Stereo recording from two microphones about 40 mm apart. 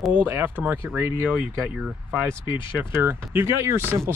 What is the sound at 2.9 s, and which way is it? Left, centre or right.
Speech, right.